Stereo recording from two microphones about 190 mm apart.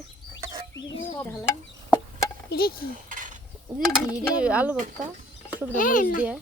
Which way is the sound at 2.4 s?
55° left (ahead or behind).